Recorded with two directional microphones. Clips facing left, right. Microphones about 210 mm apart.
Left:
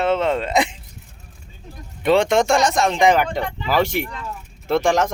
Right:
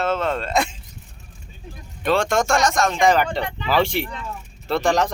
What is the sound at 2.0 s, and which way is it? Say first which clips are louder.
Speech: left 4 dB; 20° left (ahead or behind).